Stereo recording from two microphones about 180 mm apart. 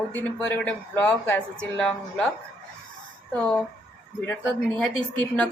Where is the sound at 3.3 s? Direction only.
5° left (ahead or behind).